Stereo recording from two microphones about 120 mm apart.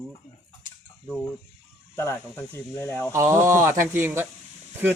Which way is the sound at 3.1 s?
25° right (ahead or behind).